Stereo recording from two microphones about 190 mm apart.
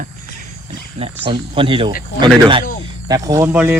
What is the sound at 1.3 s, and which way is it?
Speech, 25° right (ahead or behind).